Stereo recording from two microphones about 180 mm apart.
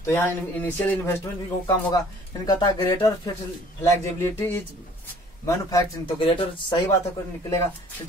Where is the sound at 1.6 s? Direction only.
20° left (ahead or behind).